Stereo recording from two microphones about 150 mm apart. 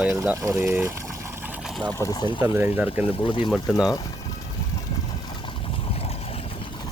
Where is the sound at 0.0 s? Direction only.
10° right (ahead or behind).